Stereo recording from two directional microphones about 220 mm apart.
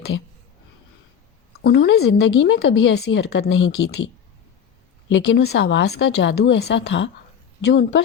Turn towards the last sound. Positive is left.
turn(degrees=50)  # may be behind; listen again after turning